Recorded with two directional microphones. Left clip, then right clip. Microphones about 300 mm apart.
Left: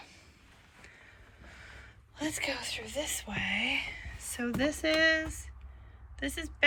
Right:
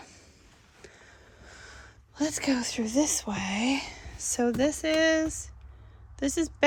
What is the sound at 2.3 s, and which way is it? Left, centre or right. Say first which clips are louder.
Speech: right 5 dB; right.